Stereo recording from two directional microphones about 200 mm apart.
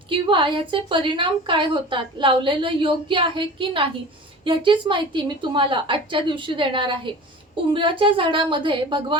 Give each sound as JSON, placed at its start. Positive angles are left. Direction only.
{"t": 0.1, "sound": "a woman's voice", "side_deg": -25}